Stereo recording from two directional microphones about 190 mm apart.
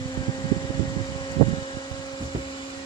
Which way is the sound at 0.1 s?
25° left (ahead or behind).